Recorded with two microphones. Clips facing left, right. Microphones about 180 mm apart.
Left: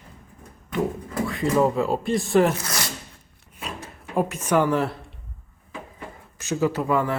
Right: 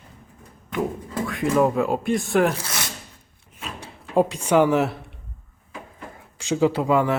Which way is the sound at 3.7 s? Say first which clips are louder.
Right 5 dB; 30° right (ahead or behind).